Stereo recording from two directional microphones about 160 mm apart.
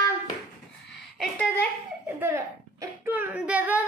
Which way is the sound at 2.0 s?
15° right (ahead or behind).